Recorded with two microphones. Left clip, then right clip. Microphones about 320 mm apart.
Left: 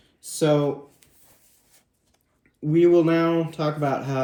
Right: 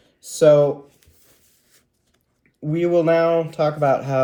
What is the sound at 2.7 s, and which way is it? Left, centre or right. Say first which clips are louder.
Speech: right 1 dB; centre.